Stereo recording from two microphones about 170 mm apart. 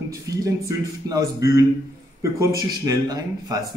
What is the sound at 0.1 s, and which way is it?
Speech, 20° right (ahead or behind).